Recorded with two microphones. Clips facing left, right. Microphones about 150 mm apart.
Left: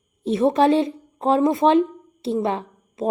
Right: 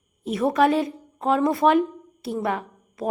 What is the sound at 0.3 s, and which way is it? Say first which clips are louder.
A woman's voice: left 3 dB; 25° left (ahead or behind).